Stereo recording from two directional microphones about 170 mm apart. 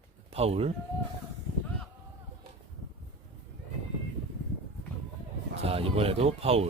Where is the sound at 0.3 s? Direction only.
35° right (ahead or behind).